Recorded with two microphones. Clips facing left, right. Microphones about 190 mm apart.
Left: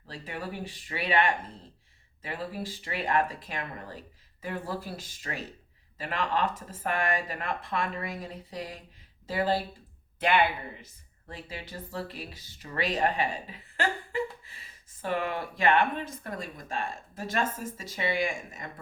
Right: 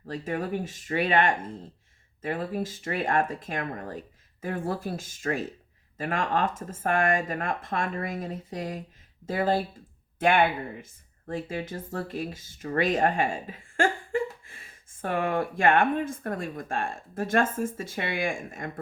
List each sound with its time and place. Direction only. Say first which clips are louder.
0.0 s speech: right 7 dB; 45° right (ahead or behind)